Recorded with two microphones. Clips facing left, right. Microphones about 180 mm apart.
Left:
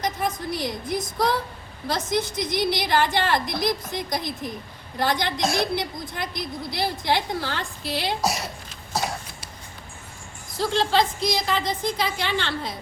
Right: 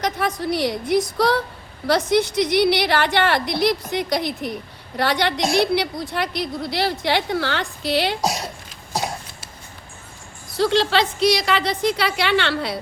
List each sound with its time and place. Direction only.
0.0 s a woman's voice: 75° right (ahead or behind)
10.6 s a woman's voice: 75° right (ahead or behind)